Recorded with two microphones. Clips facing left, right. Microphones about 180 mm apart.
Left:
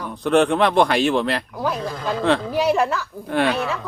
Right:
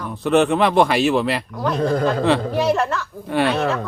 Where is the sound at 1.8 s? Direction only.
55° right (ahead or behind).